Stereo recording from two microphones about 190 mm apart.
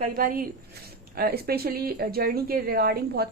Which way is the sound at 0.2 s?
50° right (ahead or behind).